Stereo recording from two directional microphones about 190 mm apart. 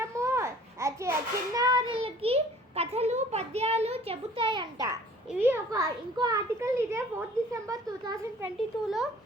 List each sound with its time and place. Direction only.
0.0 s a sound: 15° right (ahead or behind)
5.3 s a child's voice: 10° right (ahead or behind)
8.4 s a child's voice: centre (ahead or behind)